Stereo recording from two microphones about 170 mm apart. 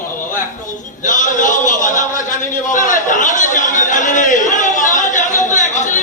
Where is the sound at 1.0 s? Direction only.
50° left (ahead or behind).